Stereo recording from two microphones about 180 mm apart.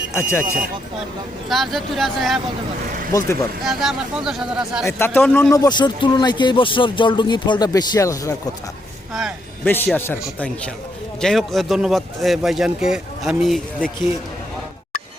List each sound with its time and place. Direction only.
0.1 s speech: 15° left (ahead or behind)
1.5 s a man's voice: centre (ahead or behind)
3.1 s a man's voice: 15° left (ahead or behind)
3.6 s a man's voice: centre (ahead or behind)
4.9 s a man's voice: 10° left (ahead or behind)
9.6 s a man's voice: 10° left (ahead or behind)